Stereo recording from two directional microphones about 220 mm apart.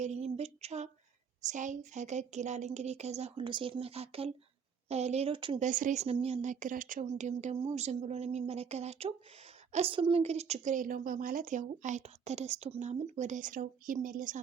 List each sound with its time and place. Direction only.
0.0 s a sound: 30° right (ahead or behind)
1.4 s speech: 35° right (ahead or behind)
5.6 s a woman's voice: 35° right (ahead or behind)